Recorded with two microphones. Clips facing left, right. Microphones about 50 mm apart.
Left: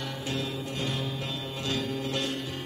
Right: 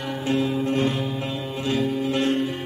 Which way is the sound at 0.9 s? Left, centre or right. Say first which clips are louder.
Right 6 dB; right.